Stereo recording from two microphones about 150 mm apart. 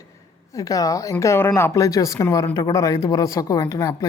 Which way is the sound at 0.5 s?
25° left (ahead or behind).